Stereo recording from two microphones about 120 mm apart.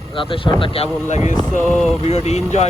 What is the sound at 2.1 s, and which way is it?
Speech, 65° left (ahead or behind).